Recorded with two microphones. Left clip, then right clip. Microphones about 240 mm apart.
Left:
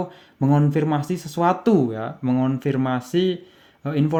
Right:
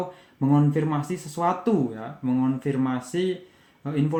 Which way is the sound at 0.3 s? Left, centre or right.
Left.